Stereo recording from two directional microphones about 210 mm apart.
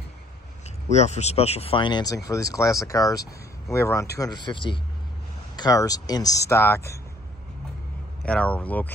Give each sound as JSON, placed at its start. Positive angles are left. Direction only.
{"t": 0.7, "sound": "speech", "side_deg": 30}
{"t": 8.2, "sound": "speech", "side_deg": 5}